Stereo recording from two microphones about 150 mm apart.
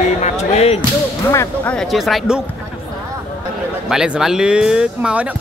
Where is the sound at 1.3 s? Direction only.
10° left (ahead or behind).